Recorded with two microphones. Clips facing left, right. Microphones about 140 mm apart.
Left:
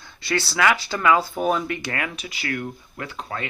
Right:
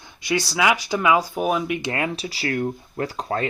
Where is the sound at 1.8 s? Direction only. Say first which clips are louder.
Right 4 dB; 25° right (ahead or behind).